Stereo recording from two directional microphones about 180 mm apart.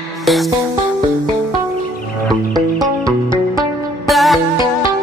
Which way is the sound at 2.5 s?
20° right (ahead or behind).